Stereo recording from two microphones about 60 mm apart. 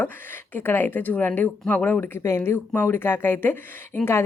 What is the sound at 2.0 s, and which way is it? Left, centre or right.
Speech, left.